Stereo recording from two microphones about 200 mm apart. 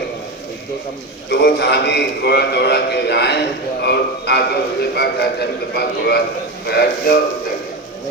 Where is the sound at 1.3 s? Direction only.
55° left (ahead or behind).